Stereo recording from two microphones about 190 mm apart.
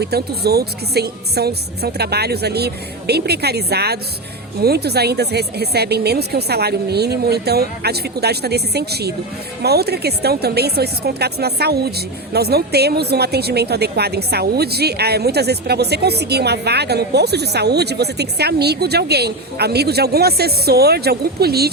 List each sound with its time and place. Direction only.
0.0 s a woman's voice: 55° right (ahead or behind)